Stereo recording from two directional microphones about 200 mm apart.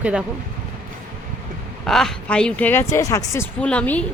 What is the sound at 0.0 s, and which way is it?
Speech, 5° right (ahead or behind).